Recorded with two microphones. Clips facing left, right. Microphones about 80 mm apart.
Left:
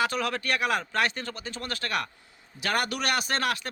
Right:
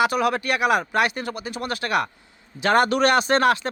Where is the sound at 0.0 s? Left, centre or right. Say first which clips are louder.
Right 7 dB; centre.